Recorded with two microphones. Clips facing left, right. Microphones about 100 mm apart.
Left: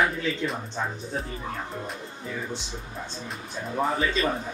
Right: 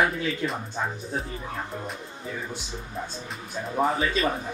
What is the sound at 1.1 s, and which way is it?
Speech, centre (ahead or behind).